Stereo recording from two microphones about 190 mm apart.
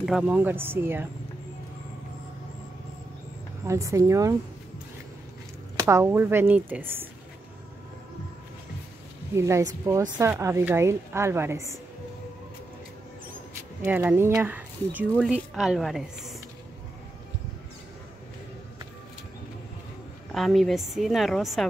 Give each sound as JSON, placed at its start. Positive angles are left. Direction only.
{"t": 0.0, "sound": "a woman's voice", "side_deg": -5}
{"t": 3.6, "sound": "a woman's voice", "side_deg": -15}
{"t": 5.8, "sound": "a woman's voice", "side_deg": -15}
{"t": 9.3, "sound": "a woman's voice", "side_deg": -15}
{"t": 13.8, "sound": "a woman's voice", "side_deg": -10}
{"t": 20.3, "sound": "a woman's voice", "side_deg": 0}